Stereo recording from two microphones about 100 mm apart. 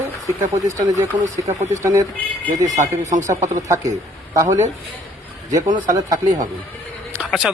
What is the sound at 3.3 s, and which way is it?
Speech, 30° right (ahead or behind).